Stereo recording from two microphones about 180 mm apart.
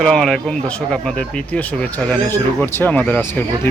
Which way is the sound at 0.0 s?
5° left (ahead or behind).